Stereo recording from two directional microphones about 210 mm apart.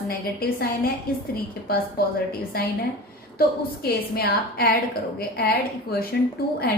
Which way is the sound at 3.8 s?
45° left (ahead or behind).